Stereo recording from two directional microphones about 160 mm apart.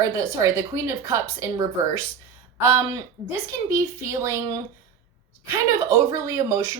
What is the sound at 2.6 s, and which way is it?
A woman's voice, 20° right (ahead or behind).